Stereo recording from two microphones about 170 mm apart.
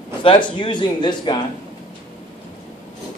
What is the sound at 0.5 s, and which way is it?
Speech, 25° left (ahead or behind).